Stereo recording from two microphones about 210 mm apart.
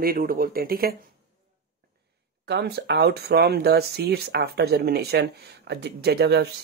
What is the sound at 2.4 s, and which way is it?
Speech, 50° right (ahead or behind).